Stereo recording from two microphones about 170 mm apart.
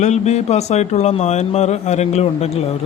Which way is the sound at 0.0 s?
40° left (ahead or behind).